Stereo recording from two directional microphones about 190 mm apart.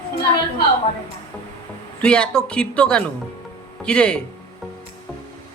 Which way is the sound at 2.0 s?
5° left (ahead or behind).